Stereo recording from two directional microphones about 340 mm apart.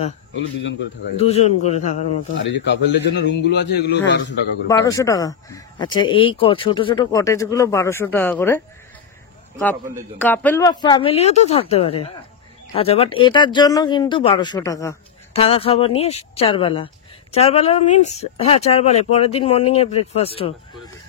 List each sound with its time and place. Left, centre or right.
1.1 s a man's voice: centre
2.3 s a man's voice: left
4.6 s speech: centre
10.1 s speech: centre